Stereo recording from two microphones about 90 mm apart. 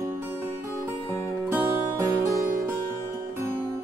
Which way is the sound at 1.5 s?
25° right (ahead or behind).